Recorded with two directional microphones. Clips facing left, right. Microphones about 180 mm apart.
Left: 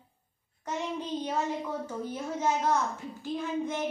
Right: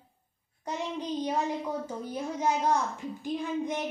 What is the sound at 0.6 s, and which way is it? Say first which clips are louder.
A woman's voice: even; 15° right (ahead or behind).